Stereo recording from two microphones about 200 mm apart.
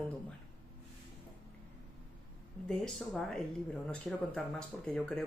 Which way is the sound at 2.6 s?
5° left (ahead or behind).